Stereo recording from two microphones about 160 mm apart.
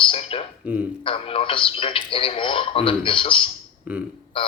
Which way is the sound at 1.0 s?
35° left (ahead or behind).